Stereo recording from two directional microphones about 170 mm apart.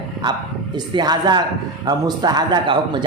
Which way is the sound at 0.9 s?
25° right (ahead or behind).